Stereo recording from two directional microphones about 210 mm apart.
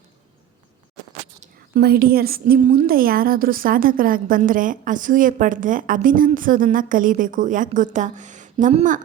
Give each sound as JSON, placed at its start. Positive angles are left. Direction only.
{"t": 1.4, "sound": "a woman's voice", "side_deg": -50}